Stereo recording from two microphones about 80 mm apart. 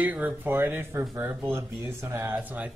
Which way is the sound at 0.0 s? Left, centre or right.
Right.